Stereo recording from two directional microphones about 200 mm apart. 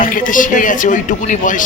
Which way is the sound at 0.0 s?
40° left (ahead or behind).